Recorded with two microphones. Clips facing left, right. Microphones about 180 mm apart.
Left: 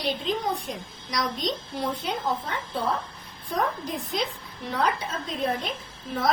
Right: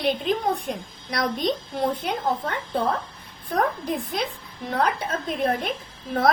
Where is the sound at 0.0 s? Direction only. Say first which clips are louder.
Right 4 dB; 55° right (ahead or behind).